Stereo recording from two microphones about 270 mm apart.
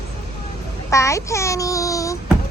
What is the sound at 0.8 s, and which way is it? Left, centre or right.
A child's voice, centre.